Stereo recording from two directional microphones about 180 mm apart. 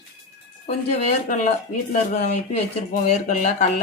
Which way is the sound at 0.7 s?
40° left (ahead or behind).